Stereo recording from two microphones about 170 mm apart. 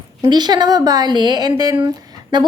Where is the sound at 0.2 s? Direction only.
25° right (ahead or behind).